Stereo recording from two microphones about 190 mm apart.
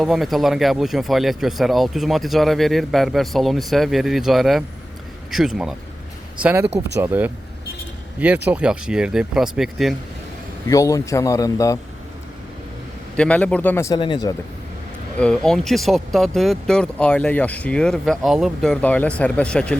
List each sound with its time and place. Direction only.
0.0 s speech: centre (ahead or behind)
10.7 s a man's voice: 15° left (ahead or behind)
13.1 s a man's voice: 5° left (ahead or behind); by 14.3 s 20° left (ahead or behind)
15.2 s speech: 5° left (ahead or behind)